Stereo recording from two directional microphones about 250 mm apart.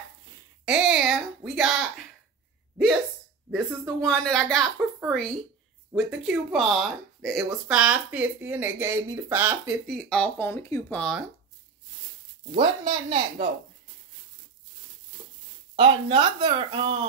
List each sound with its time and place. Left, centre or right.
0.7 s a sound: centre
3.4 s speech: centre
9.8 s speech: centre
12.4 s speech: centre
15.7 s speech: right